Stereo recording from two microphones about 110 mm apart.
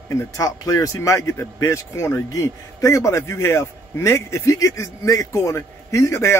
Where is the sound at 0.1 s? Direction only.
30° left (ahead or behind).